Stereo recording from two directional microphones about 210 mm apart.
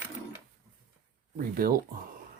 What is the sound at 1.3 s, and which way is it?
Speech, 45° right (ahead or behind).